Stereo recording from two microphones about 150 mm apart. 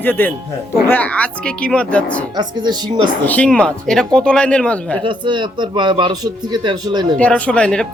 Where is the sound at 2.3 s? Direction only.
30° right (ahead or behind).